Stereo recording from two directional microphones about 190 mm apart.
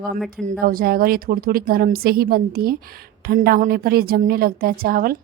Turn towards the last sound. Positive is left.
turn(degrees=-50)  # may be behind; listen again after turning